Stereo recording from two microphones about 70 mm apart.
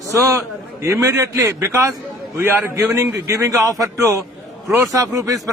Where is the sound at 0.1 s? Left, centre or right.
Right.